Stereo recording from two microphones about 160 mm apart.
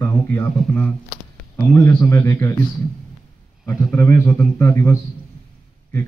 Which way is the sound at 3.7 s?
15° left (ahead or behind).